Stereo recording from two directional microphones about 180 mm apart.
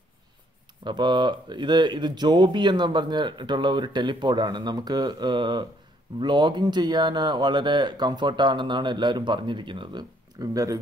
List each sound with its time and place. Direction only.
0.8 s speech: 25° right (ahead or behind)